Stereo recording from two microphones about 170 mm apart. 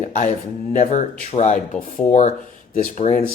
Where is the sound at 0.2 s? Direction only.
50° left (ahead or behind).